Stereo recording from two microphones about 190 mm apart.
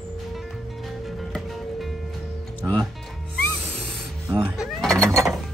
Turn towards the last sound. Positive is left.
turn(degrees=-15)  # may be behind; listen again after turning